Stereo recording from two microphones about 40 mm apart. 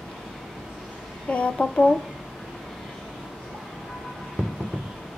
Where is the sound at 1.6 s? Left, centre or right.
Centre.